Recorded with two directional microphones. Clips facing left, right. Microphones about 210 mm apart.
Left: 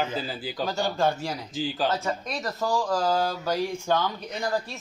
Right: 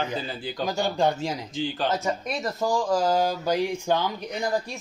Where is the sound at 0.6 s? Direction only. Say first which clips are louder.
Right 1 dB; 15° right (ahead or behind).